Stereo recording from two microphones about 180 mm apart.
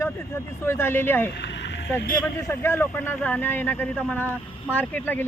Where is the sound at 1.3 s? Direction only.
70° left (ahead or behind).